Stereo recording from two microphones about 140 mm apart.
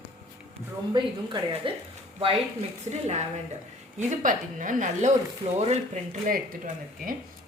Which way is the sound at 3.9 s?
60° right (ahead or behind).